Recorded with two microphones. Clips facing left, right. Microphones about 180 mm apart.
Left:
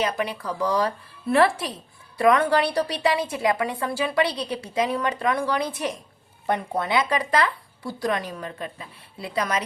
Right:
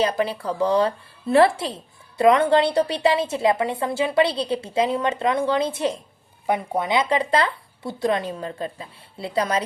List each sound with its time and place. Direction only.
0.0 s speech: 30° right (ahead or behind)
6.5 s speech: 15° right (ahead or behind); by 9.6 s 30° right (ahead or behind)